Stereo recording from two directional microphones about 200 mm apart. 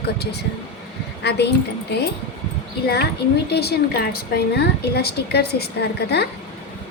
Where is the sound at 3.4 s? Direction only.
55° left (ahead or behind).